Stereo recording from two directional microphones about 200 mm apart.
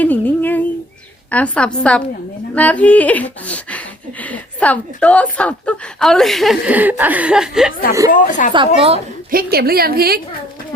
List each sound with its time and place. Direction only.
0.0 s a sound: 10° left (ahead or behind)
1.3 s a woman's voice: 5° left (ahead or behind)
2.6 s a sound: 5° left (ahead or behind)
8.1 s speech: 40° left (ahead or behind)
8.5 s a woman's voice: 25° right (ahead or behind)
9.3 s a woman's voice: 50° right (ahead or behind)